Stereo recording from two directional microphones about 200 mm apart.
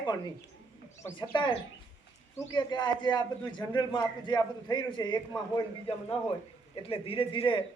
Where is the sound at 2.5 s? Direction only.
20° left (ahead or behind).